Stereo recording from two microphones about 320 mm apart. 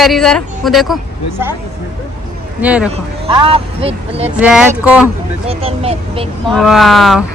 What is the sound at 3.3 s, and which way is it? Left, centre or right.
Speech, centre.